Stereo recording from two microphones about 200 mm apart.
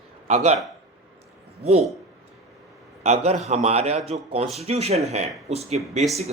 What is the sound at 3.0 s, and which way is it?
Speech, 35° right (ahead or behind).